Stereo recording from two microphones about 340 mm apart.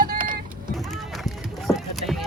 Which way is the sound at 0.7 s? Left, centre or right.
Centre.